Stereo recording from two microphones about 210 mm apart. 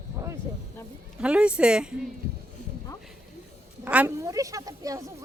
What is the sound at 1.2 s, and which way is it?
Speech, 5° right (ahead or behind).